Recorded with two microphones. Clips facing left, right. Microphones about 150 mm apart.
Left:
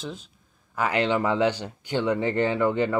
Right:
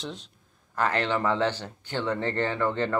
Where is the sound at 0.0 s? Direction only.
Centre (ahead or behind).